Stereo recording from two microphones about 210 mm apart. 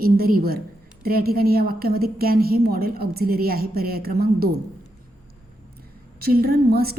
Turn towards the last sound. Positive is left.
turn(degrees=-45)  # may be behind; listen again after turning